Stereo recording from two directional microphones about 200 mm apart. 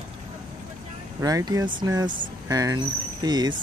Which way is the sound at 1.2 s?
15° right (ahead or behind).